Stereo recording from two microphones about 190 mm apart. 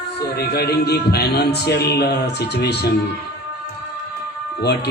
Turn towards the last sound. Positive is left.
turn(degrees=60)  # may be behind; listen again after turning